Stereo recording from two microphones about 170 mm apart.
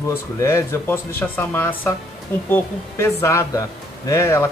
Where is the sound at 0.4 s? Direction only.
15° left (ahead or behind).